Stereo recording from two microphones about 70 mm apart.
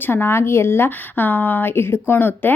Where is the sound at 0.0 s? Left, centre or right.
Left.